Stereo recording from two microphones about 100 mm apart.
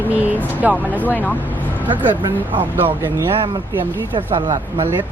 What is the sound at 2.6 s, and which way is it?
Speech, 20° right (ahead or behind).